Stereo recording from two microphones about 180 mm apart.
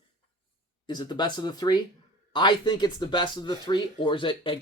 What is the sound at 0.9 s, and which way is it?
Speech, 25° left (ahead or behind).